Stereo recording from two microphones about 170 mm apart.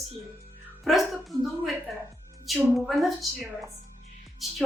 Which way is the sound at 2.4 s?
Centre (ahead or behind).